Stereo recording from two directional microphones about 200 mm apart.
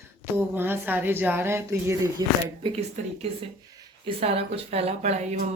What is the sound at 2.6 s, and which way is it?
Speech, 30° right (ahead or behind).